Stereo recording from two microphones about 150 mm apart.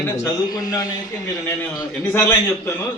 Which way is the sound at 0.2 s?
25° left (ahead or behind).